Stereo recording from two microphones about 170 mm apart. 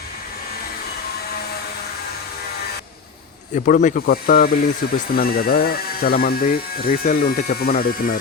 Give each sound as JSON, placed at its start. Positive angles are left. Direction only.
{"t": 3.7, "sound": "speech", "side_deg": 50}